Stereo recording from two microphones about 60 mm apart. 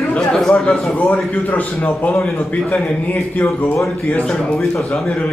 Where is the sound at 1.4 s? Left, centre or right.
Left.